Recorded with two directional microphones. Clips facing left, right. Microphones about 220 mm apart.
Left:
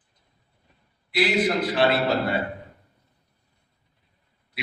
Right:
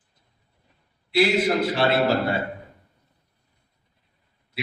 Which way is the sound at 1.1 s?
25° right (ahead or behind).